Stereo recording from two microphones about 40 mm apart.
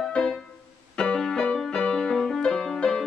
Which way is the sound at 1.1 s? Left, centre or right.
Left.